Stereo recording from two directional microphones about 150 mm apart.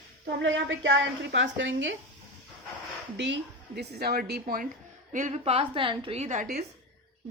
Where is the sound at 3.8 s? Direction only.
90° right.